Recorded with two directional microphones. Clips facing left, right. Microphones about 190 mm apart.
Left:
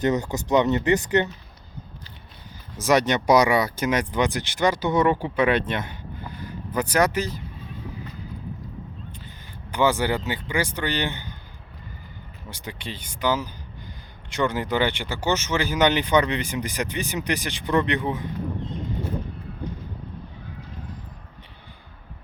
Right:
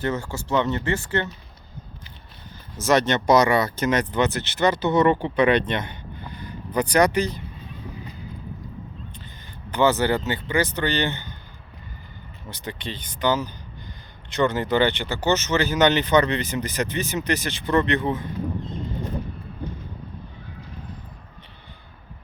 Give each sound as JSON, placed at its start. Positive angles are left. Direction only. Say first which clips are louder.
{"t": 0.0, "sound": "speech", "louder": "left 4 dB", "side_deg": 20}
{"t": 2.7, "sound": "speech", "louder": "even", "side_deg": 15}
{"t": 9.6, "sound": "speech", "louder": "right 2 dB", "side_deg": 10}
{"t": 12.5, "sound": "speech", "louder": "right 2 dB", "side_deg": 10}